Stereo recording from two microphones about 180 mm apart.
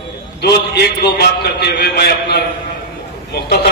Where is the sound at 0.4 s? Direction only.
65° left (ahead or behind).